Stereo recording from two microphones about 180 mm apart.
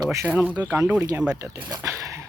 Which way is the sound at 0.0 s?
15° right (ahead or behind).